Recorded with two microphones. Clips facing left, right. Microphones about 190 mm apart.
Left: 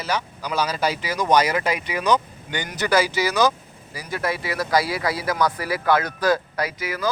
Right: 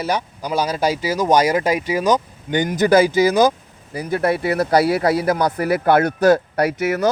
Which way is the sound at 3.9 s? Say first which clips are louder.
Right 7 dB; 55° right (ahead or behind).